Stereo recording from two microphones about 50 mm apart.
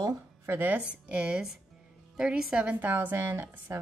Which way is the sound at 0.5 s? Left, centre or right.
Right.